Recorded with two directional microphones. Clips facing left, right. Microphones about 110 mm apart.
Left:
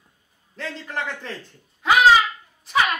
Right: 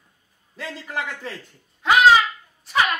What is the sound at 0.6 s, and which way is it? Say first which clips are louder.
Speech: even; 5° right (ahead or behind).